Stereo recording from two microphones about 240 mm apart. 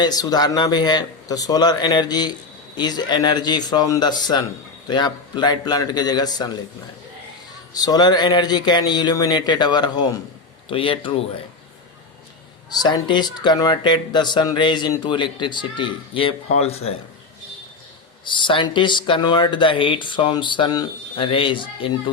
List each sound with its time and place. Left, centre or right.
0.0 s speech: centre
7.7 s speech: centre
12.7 s speech: centre
18.3 s speech: centre